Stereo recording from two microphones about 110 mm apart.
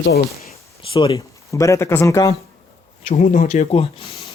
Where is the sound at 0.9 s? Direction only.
50° left (ahead or behind).